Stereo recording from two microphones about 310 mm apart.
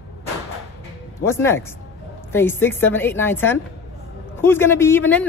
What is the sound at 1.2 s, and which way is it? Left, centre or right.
A woman's voice, centre.